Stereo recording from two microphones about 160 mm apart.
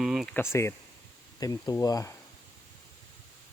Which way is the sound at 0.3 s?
15° left (ahead or behind).